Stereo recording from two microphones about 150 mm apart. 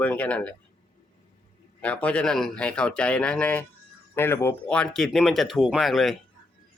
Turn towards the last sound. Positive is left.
turn(degrees=0)  # may be behind; listen again after turning